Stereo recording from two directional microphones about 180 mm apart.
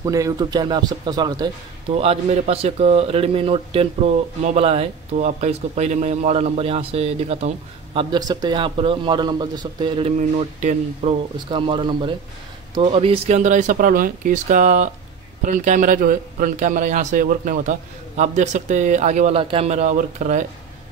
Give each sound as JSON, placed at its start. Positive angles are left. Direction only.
{"t": 0.0, "sound": "speech", "side_deg": -20}
{"t": 10.1, "sound": "speech", "side_deg": -40}
{"t": 11.3, "sound": "a man's voice", "side_deg": -25}